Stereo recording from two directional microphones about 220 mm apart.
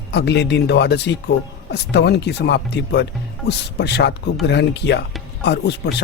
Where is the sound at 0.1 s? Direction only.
50° left (ahead or behind).